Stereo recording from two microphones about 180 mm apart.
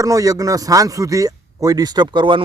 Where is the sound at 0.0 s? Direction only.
20° right (ahead or behind).